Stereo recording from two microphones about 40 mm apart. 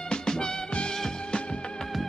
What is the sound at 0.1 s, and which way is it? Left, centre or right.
Music, centre.